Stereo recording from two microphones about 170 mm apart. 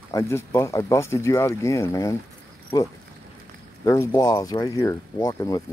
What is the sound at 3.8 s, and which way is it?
Speech, 15° left (ahead or behind).